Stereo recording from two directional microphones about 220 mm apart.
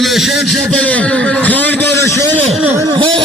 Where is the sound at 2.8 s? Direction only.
20° right (ahead or behind).